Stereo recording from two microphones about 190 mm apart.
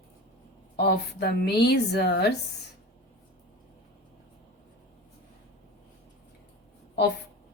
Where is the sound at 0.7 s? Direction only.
60° left (ahead or behind).